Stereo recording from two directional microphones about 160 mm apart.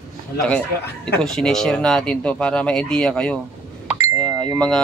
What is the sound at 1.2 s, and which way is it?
Speech, 5° left (ahead or behind).